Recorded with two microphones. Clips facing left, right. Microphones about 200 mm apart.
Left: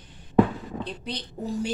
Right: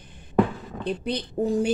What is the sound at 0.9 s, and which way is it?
Speech, 55° right (ahead or behind).